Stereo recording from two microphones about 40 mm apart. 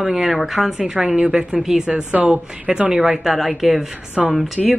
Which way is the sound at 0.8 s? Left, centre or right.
Right.